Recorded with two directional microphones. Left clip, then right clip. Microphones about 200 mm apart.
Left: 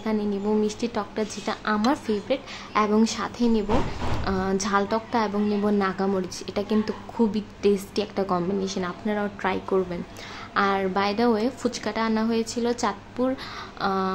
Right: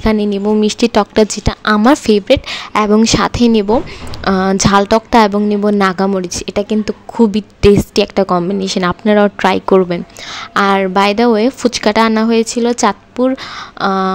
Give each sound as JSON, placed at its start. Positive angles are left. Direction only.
{"t": 0.0, "sound": "a woman's voice", "side_deg": -45}